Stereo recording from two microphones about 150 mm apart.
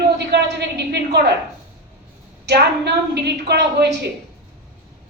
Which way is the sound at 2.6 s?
90° right.